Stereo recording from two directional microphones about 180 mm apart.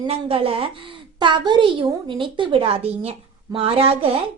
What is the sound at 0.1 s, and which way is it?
A woman's voice, 30° right (ahead or behind).